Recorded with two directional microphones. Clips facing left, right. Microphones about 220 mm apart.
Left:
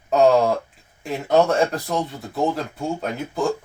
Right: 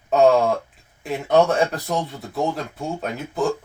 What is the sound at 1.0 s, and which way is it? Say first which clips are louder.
Speech: even; centre (ahead or behind).